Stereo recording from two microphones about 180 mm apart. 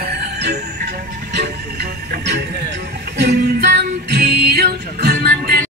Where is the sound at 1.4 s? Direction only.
60° right (ahead or behind).